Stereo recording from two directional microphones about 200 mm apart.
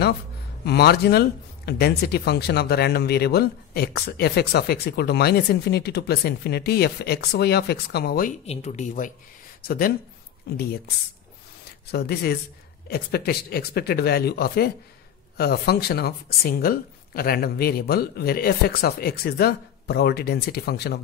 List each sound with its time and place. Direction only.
0.7 s speech: 55° left (ahead or behind)
8.5 s speech: 35° left (ahead or behind)
9.6 s speech: 50° left (ahead or behind)
11.9 s speech: 50° left (ahead or behind)